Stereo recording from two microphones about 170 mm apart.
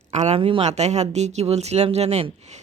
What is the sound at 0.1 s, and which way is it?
A woman's voice, 40° right (ahead or behind).